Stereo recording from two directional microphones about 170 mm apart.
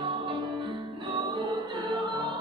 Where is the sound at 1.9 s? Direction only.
25° right (ahead or behind).